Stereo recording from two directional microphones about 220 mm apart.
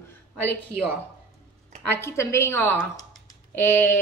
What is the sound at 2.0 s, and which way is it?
Speech, 10° left (ahead or behind).